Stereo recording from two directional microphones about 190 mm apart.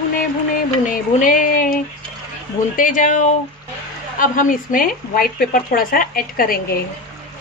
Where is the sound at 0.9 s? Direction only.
45° left (ahead or behind).